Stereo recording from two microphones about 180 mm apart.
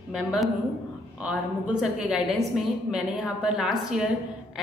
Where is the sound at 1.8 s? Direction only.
5° right (ahead or behind).